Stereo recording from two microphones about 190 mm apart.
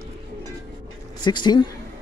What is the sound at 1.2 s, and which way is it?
Speech, 25° left (ahead or behind).